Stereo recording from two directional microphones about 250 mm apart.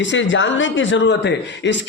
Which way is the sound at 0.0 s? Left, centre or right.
Left.